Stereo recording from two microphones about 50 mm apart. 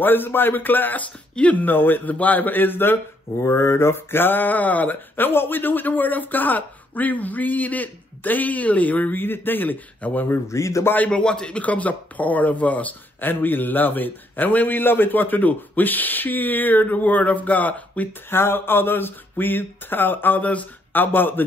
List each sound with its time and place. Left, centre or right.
0.0 s speech: left
1.3 s speech: left
3.4 s speech: left
5.1 s speech: left
10.5 s a man's voice: left
11.1 s speech: centre; by 18.0 s left
18.3 s speech: left